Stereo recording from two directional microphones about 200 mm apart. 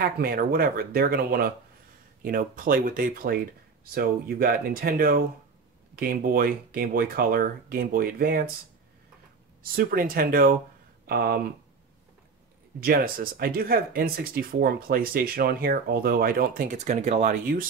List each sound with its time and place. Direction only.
0.0 s speech: 50° right (ahead or behind)
9.6 s speech: 45° right (ahead or behind)
12.8 s speech: 50° right (ahead or behind)